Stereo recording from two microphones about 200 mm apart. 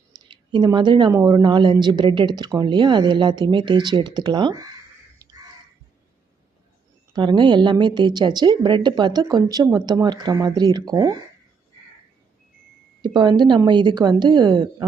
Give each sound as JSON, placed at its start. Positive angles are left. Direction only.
{"t": 0.1, "sound": "a sound", "side_deg": -20}
{"t": 0.5, "sound": "a woman's voice", "side_deg": -20}
{"t": 7.1, "sound": "a woman's voice", "side_deg": -20}
{"t": 13.0, "sound": "a woman's voice", "side_deg": -20}